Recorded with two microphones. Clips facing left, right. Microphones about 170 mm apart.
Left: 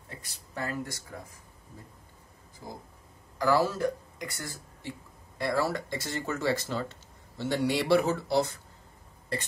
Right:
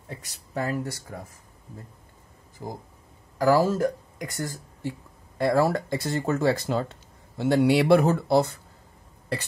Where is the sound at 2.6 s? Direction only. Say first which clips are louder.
Right 7 dB; 55° right (ahead or behind).